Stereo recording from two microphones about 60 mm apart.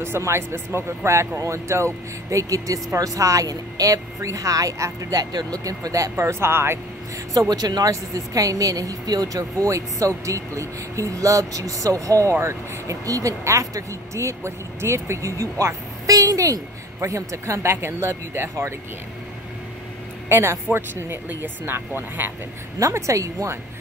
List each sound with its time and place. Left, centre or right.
0.0 s speech: right
6.1 s speech: right
7.3 s speech: right
12.4 s speech: right
13.0 s speech: right
13.4 s speech: right
16.1 s a sound: right
17.0 s speech: right
20.2 s speech: right
22.8 s speech: right